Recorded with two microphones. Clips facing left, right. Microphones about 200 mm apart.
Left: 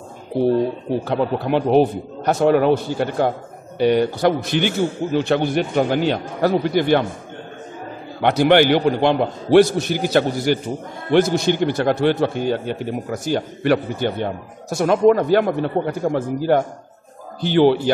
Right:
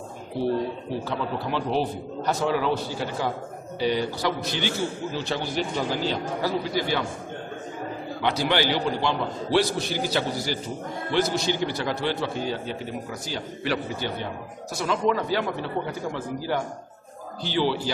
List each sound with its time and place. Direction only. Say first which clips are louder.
1.0 s a man's voice: left 9 dB; 55° left (ahead or behind)
8.2 s a man's voice: left 10 dB; 55° left (ahead or behind)